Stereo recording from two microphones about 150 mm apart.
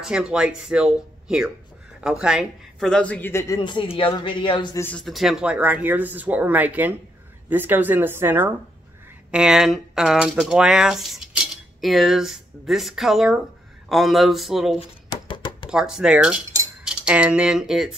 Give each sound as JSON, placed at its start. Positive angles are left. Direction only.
{"t": 0.0, "sound": "speech", "side_deg": -5}
{"t": 2.9, "sound": "speech", "side_deg": 10}
{"t": 4.7, "sound": "speech", "side_deg": 15}
{"t": 5.0, "sound": "speech", "side_deg": 0}
{"t": 14.8, "sound": "a sound", "side_deg": 30}
{"t": 15.7, "sound": "speech", "side_deg": -5}